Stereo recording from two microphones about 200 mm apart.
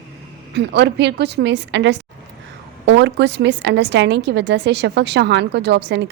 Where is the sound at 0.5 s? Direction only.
55° right (ahead or behind).